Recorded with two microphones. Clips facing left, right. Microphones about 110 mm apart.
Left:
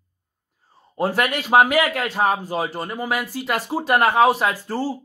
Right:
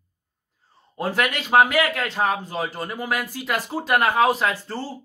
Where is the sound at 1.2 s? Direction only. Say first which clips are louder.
Left 1 dB; 5° left (ahead or behind).